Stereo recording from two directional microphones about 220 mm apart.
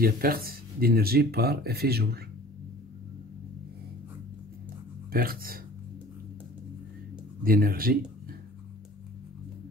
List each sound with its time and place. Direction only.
0.0 s speech: 40° right (ahead or behind)
5.1 s speech: 40° right (ahead or behind)
7.4 s speech: 40° right (ahead or behind)